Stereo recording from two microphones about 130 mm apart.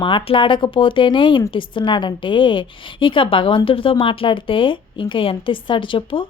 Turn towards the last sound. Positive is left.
turn(degrees=40)  # may be behind; listen again after turning